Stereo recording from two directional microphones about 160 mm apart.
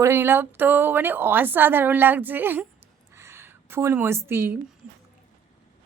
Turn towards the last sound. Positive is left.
turn(degrees=-15)  # may be behind; listen again after turning